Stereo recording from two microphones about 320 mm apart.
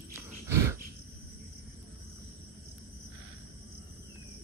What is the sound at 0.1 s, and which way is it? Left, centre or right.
Dog, centre.